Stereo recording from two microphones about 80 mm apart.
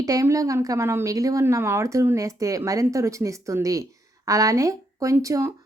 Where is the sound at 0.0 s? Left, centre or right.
Right.